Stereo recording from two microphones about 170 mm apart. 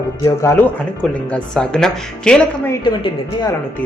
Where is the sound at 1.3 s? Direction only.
5° left (ahead or behind).